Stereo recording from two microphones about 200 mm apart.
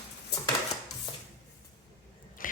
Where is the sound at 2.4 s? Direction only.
40° left (ahead or behind).